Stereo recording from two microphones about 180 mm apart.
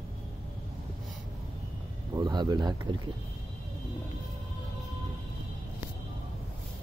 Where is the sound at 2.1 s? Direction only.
20° right (ahead or behind).